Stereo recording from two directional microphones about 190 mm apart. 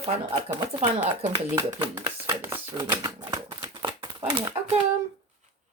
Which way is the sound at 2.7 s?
20° right (ahead or behind).